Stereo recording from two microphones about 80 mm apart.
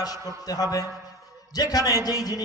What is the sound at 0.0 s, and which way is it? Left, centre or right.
A man's voice, left.